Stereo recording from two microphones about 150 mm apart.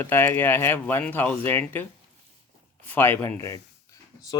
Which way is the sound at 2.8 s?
15° left (ahead or behind).